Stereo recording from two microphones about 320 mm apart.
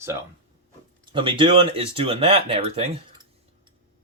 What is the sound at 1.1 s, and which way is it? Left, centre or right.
Speech, centre.